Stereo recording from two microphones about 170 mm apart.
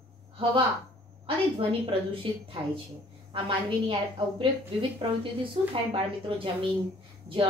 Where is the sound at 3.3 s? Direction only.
30° right (ahead or behind).